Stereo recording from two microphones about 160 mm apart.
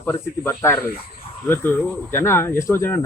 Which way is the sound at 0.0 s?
15° left (ahead or behind).